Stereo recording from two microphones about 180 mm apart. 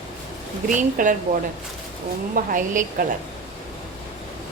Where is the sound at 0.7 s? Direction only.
45° right (ahead or behind).